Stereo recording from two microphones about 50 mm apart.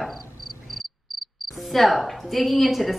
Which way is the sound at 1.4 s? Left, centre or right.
Centre.